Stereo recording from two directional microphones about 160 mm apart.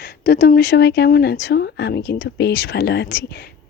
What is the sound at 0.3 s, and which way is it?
Speech, 70° left (ahead or behind).